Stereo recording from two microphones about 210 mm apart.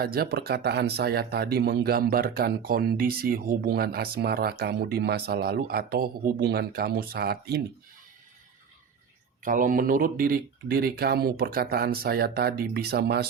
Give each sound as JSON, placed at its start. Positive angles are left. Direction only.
{"t": 0.0, "sound": "speech", "side_deg": -45}
{"t": 9.4, "sound": "speech", "side_deg": -40}